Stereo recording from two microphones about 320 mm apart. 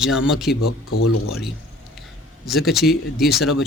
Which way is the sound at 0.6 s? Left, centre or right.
Left.